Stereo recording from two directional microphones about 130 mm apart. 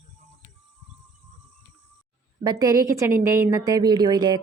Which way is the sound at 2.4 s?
30° right (ahead or behind).